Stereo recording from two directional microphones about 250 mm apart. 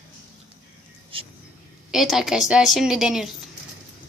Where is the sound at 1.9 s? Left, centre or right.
Centre.